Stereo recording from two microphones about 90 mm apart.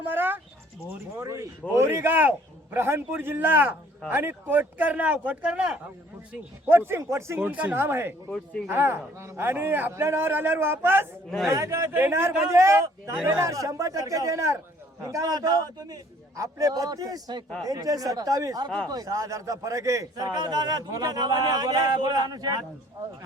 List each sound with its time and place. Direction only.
0.1 s a sound: 20° right (ahead or behind)
1.2 s a man's voice: 35° right (ahead or behind); by 5.8 s 10° right (ahead or behind)
6.3 s a man's voice: 25° right (ahead or behind)
7.3 s a man's voice: 15° right (ahead or behind); by 20.2 s 40° right (ahead or behind)
20.3 s a man's voice: 50° right (ahead or behind)